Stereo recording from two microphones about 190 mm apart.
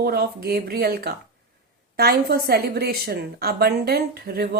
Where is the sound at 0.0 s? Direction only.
55° right (ahead or behind).